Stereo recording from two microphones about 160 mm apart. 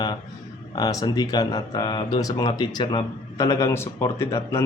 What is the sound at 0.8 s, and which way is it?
Speech, 25° left (ahead or behind).